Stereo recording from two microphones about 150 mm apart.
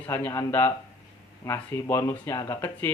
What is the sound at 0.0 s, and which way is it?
Speech, 15° left (ahead or behind).